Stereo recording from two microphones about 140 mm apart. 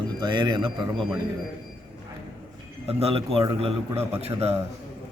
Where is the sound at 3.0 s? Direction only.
45° right (ahead or behind).